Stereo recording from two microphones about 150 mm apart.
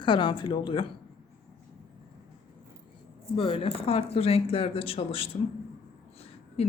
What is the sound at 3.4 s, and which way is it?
Speech, 35° left (ahead or behind).